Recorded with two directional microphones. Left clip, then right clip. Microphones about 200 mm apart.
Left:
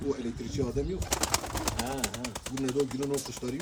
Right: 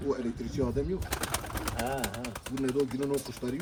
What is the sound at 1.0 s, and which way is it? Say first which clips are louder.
Speech: left 4 dB; 35° left (ahead or behind).